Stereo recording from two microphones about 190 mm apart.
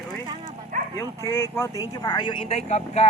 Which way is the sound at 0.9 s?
15° left (ahead or behind).